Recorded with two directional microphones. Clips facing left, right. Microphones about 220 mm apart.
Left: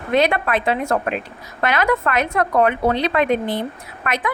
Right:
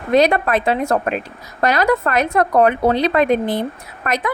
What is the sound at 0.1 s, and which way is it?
A woman's voice, 40° right (ahead or behind).